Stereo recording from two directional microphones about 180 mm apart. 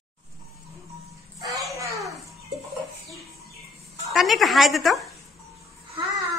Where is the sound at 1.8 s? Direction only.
15° right (ahead or behind).